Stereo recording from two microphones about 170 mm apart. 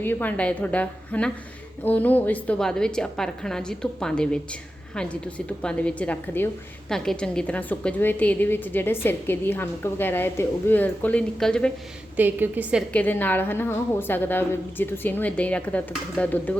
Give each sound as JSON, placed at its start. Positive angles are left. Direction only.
{"t": 0.0, "sound": "a woman's voice", "side_deg": 10}
{"t": 12.1, "sound": "a woman's voice", "side_deg": -10}
{"t": 12.9, "sound": "a woman's voice", "side_deg": 10}